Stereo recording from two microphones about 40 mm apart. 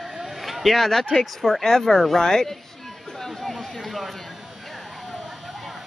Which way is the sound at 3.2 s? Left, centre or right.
Centre.